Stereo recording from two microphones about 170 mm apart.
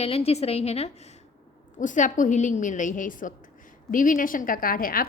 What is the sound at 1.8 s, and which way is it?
A woman's voice, 50° left (ahead or behind).